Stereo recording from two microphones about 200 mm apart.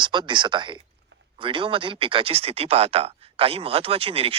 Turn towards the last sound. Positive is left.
turn(degrees=-30)  # may be behind; listen again after turning